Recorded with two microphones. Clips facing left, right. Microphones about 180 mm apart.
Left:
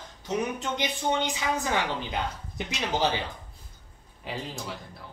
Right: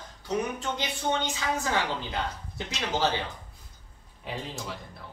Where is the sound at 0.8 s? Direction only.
15° left (ahead or behind).